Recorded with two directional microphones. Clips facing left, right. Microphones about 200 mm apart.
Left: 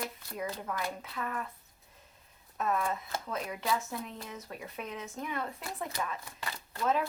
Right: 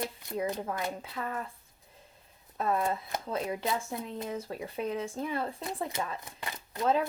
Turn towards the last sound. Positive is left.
turn(degrees=-30)  # may be behind; listen again after turning